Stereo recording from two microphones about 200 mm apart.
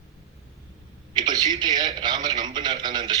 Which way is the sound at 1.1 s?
20° right (ahead or behind).